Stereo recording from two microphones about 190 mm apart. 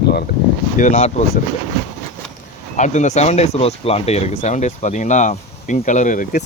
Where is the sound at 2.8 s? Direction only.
40° left (ahead or behind).